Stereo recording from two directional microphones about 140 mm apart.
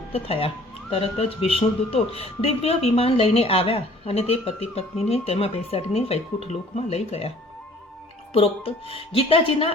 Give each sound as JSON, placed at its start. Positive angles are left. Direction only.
{"t": 0.1, "sound": "speech", "side_deg": 45}